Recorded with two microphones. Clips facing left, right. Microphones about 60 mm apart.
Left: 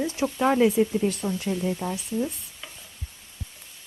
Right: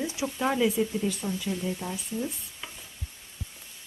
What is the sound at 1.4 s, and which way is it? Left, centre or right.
Speech, left.